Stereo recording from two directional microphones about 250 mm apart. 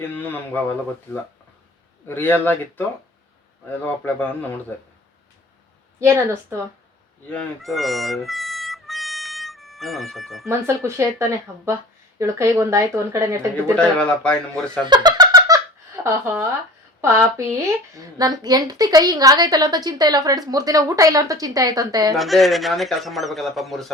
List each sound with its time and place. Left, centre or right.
0.0 s speech: centre
3.8 s speech: centre
6.0 s a woman's voice: centre
7.3 s music: centre
10.5 s a woman's voice: centre
13.7 s speech: centre
14.8 s a sound: centre
16.0 s a woman's voice: centre
22.1 s speech: centre